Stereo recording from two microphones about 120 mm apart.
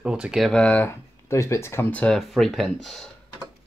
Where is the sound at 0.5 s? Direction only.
10° left (ahead or behind).